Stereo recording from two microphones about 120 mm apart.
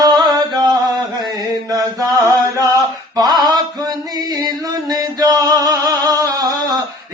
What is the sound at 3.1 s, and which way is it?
Mantra, 35° right (ahead or behind).